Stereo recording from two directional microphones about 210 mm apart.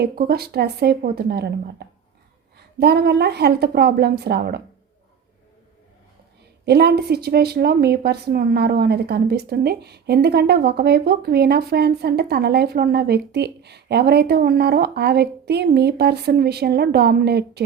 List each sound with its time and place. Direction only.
0.0 s speech: 50° right (ahead or behind)
2.7 s speech: 50° right (ahead or behind)
6.7 s speech: 50° right (ahead or behind)